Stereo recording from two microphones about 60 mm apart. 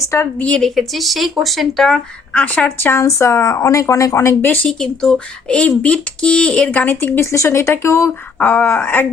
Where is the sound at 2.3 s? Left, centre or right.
Left.